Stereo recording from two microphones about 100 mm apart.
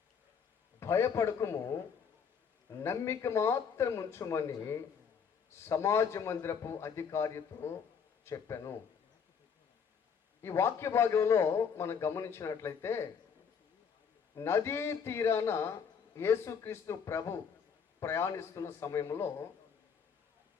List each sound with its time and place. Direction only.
0.8 s a man's voice: 25° left (ahead or behind)
2.8 s a man's voice: 30° left (ahead or behind)
10.4 s a man's voice: 25° left (ahead or behind)
14.3 s a man's voice: 25° left (ahead or behind)